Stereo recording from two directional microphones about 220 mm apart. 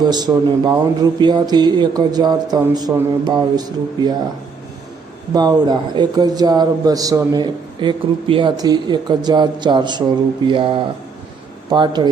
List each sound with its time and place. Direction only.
0.0 s a man's voice: 20° right (ahead or behind)
5.3 s a man's voice: 20° right (ahead or behind)